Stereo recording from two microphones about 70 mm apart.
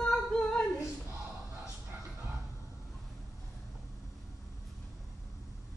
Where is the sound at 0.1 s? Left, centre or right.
Centre.